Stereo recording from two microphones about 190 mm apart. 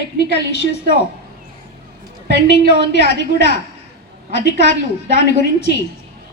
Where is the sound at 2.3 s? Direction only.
65° left (ahead or behind).